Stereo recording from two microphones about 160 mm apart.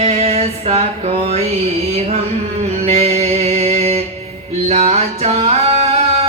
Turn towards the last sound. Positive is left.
turn(degrees=-40)  # may be behind; listen again after turning